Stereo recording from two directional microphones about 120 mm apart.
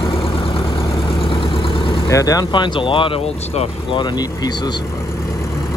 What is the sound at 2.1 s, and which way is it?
Speech, 30° left (ahead or behind).